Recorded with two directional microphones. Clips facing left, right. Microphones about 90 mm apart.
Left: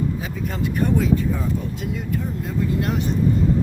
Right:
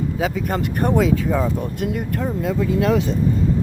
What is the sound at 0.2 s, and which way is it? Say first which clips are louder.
Speech: right 8 dB; 90° right.